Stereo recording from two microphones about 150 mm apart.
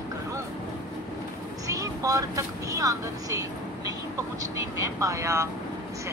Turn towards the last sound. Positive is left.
turn(degrees=-20)  # may be behind; listen again after turning